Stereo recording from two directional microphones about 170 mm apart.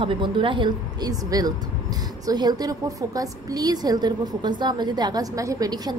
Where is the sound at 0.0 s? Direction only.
30° right (ahead or behind).